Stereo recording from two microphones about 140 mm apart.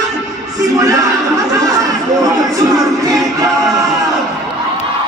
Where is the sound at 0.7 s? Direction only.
25° right (ahead or behind).